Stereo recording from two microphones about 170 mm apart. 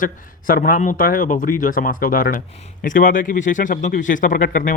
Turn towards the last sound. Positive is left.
turn(degrees=55)  # may be behind; listen again after turning